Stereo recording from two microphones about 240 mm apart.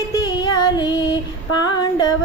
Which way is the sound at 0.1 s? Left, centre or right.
Centre.